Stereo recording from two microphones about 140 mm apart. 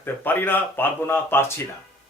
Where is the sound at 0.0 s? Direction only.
15° left (ahead or behind).